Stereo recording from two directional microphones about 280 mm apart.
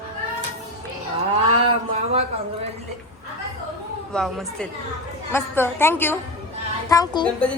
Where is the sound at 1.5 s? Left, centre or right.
Right.